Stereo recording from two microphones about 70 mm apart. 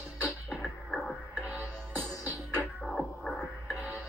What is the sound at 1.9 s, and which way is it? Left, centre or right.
Music, left.